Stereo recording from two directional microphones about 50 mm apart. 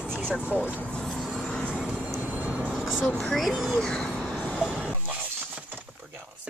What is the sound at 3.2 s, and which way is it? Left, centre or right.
Speech, centre.